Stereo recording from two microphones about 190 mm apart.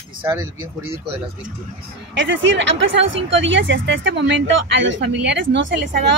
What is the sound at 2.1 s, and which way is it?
Speech, 70° right (ahead or behind).